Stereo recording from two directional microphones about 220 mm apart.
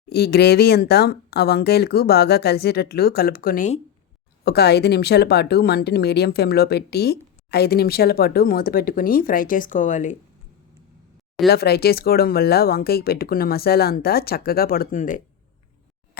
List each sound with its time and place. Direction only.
0.1 s speech: 45° left (ahead or behind)
11.4 s speech: 45° left (ahead or behind)